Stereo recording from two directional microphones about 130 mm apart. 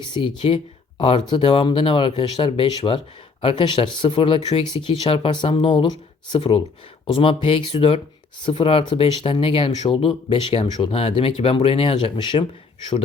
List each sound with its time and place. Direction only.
0.1 s speech: 40° left (ahead or behind)